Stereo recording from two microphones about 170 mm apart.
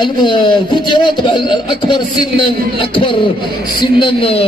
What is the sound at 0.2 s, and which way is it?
A man's voice, 30° left (ahead or behind).